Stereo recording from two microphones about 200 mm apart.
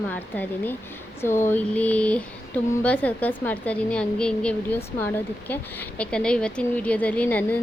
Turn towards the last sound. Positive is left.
turn(degrees=5)  # may be behind; listen again after turning